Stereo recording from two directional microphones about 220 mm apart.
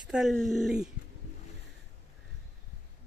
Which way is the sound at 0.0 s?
Centre (ahead or behind).